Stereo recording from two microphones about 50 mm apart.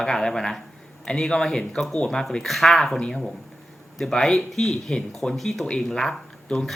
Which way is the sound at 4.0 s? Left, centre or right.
Centre.